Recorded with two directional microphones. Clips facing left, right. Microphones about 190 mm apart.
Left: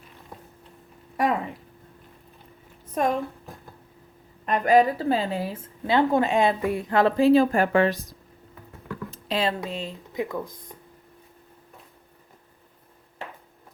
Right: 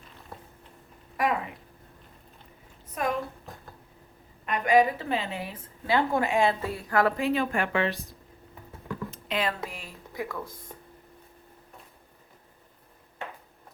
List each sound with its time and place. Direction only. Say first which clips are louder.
2.9 s a sound: left 5 dB; 30° left (ahead or behind)
4.4 s a woman's voice: left 3 dB; 35° left (ahead or behind)
9.0 s speech: left 4 dB; 35° left (ahead or behind); by 10.8 s 15° left (ahead or behind)